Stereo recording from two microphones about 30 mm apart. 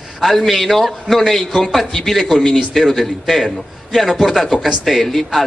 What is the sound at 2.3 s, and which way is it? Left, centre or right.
Speech, centre.